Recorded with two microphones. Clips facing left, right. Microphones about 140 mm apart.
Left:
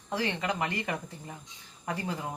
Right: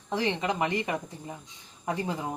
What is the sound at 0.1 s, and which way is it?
Speech, 20° right (ahead or behind).